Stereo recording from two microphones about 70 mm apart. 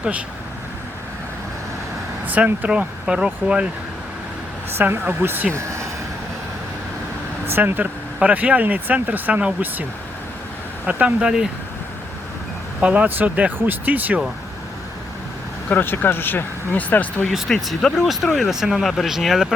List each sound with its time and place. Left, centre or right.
2.2 s speech: right
4.8 s speech: right
5.5 s vehicle: right
7.5 s speech: right
10.8 s speech: centre
12.8 s speech: centre
15.7 s speech: left
17.3 s speech: centre